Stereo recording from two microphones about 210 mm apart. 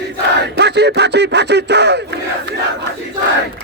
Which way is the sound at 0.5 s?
55° right (ahead or behind).